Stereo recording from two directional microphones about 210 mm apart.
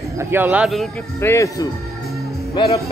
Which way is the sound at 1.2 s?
15° left (ahead or behind).